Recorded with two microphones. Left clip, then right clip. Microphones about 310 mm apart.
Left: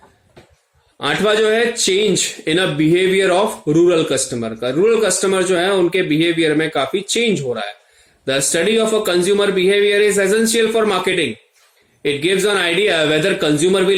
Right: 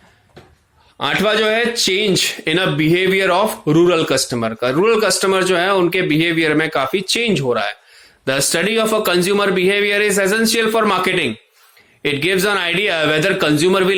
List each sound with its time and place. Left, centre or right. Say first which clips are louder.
0.9 s a man's voice: even; centre